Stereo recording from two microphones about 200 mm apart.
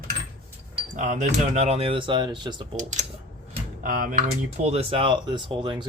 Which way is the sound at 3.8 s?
45° right (ahead or behind).